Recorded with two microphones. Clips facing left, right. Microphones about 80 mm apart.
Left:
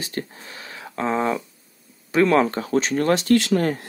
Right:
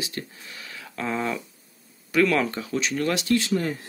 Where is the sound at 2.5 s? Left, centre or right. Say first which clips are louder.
Left 6 dB; left.